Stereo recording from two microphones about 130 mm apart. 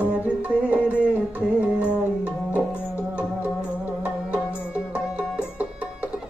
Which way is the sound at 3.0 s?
10° right (ahead or behind).